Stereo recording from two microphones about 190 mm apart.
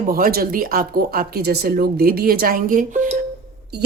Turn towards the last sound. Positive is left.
turn(degrees=-40)  # may be behind; listen again after turning